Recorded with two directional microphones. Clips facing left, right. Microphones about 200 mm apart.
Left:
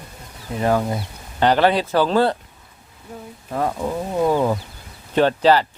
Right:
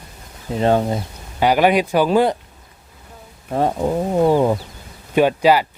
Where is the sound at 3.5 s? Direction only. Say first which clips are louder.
Right 4 dB; 30° right (ahead or behind).